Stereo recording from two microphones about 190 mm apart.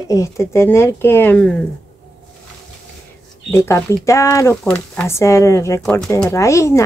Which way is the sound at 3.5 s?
15° left (ahead or behind).